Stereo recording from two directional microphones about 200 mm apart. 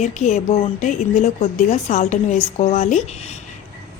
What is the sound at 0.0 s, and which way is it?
A woman's voice, 35° left (ahead or behind).